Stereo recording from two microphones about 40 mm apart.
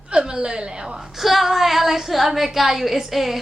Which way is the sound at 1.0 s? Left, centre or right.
Centre.